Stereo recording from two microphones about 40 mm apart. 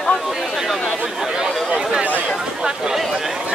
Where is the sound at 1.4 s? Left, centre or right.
Centre.